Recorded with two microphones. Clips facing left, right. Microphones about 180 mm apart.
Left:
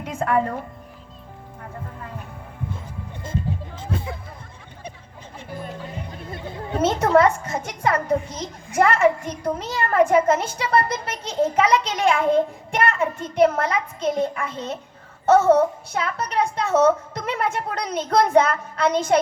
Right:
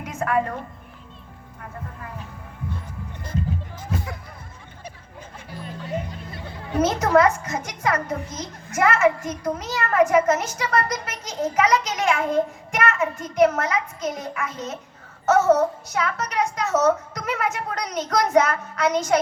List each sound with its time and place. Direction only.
0.0 s music: 30° left (ahead or behind)
3.8 s music: 25° left (ahead or behind)
6.3 s a woman's voice: 25° left (ahead or behind)